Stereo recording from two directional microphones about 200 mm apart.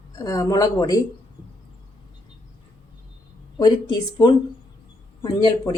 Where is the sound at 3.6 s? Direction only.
20° left (ahead or behind).